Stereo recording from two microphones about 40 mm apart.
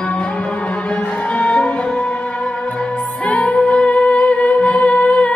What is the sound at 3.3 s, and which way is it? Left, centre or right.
Music, left.